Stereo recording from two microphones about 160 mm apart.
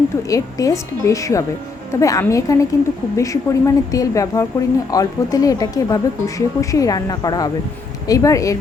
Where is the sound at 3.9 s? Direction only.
20° left (ahead or behind).